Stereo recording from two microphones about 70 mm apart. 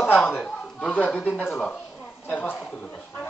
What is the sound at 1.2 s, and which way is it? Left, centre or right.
Speech, left.